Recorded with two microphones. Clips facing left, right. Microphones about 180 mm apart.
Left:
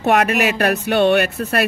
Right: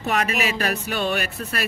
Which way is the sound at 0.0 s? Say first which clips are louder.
Left 7 dB; 65° left (ahead or behind).